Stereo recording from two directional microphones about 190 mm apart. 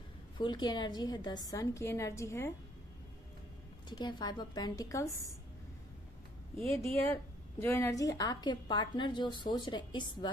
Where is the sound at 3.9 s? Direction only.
20° left (ahead or behind).